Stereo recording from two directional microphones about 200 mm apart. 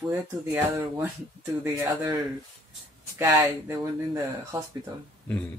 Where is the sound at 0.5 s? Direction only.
10° right (ahead or behind).